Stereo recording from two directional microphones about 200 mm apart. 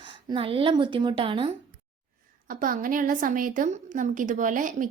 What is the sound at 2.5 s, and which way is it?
A woman's voice, 45° right (ahead or behind).